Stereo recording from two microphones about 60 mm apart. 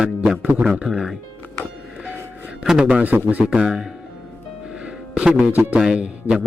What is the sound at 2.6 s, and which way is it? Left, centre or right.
Speech, centre.